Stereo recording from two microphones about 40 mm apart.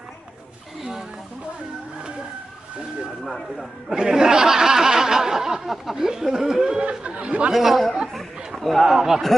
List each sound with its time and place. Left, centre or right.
0.8 s a sound: centre
3.9 s speech: centre
6.8 s speech: right
7.5 s speech: centre
8.1 s chatter: centre
8.9 s speech: centre